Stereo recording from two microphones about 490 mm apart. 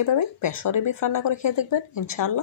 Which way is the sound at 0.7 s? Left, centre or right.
Left.